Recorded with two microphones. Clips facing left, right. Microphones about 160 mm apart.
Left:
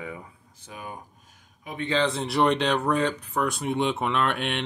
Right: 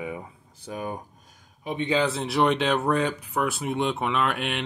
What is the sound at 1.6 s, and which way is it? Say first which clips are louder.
Speech: right 4 dB; 25° right (ahead or behind).